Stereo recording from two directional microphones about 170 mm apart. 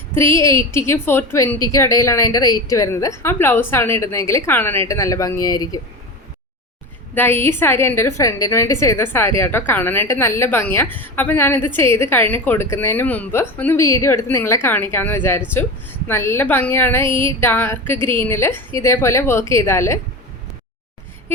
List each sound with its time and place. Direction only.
0.1 s speech: 15° left (ahead or behind)
7.1 s speech: 10° left (ahead or behind)